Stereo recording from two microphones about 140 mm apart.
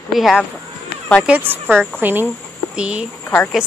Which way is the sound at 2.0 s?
15° right (ahead or behind).